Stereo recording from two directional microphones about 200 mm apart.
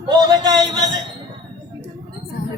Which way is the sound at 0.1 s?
20° right (ahead or behind).